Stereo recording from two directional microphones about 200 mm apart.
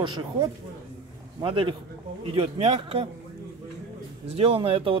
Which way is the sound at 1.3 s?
25° right (ahead or behind).